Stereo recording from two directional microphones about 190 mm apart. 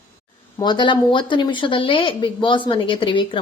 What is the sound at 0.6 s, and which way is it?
Speech, 25° left (ahead or behind).